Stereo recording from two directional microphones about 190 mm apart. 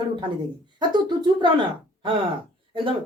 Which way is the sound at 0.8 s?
25° right (ahead or behind).